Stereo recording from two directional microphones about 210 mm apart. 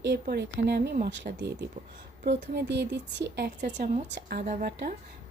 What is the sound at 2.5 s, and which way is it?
Speech, 55° right (ahead or behind).